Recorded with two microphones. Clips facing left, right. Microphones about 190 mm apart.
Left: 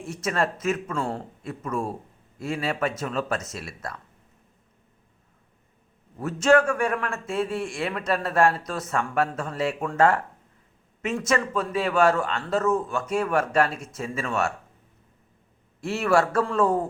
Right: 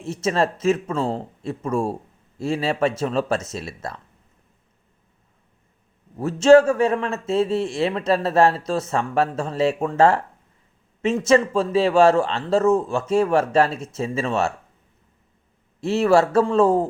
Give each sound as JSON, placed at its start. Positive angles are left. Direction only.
{"t": 0.0, "sound": "speech", "side_deg": -25}
{"t": 6.1, "sound": "speech", "side_deg": -25}
{"t": 15.8, "sound": "speech", "side_deg": -25}